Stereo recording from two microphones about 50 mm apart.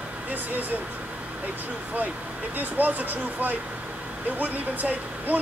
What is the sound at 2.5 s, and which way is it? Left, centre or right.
Speech, right.